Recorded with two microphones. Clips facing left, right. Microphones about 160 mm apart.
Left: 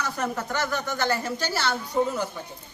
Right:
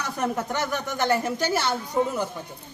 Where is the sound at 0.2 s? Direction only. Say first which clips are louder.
Right 4 dB; 15° right (ahead or behind).